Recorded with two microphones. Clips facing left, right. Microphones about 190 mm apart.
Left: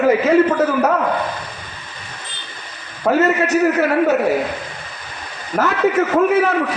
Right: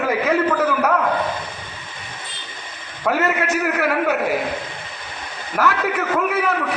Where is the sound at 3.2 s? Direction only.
25° left (ahead or behind).